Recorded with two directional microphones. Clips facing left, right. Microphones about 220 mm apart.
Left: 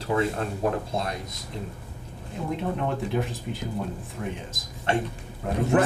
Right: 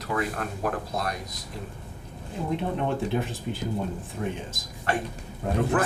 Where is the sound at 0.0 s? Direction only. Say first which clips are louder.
Left 4 dB; 25° left (ahead or behind).